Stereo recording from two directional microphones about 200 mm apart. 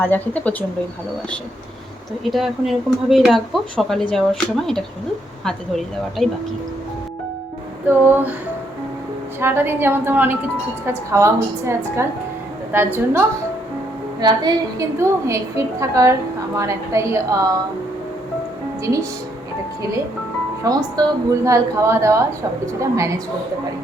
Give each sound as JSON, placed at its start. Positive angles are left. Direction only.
{"t": 0.0, "sound": "speech", "side_deg": 10}
{"t": 2.3, "sound": "speech", "side_deg": 0}
{"t": 6.2, "sound": "speech", "side_deg": 0}
{"t": 7.9, "sound": "a woman's voice", "side_deg": -10}
{"t": 9.4, "sound": "a woman's voice", "side_deg": -10}
{"t": 14.2, "sound": "a woman's voice", "side_deg": -20}
{"t": 18.8, "sound": "speech", "side_deg": -15}
{"t": 20.7, "sound": "a woman's voice", "side_deg": -20}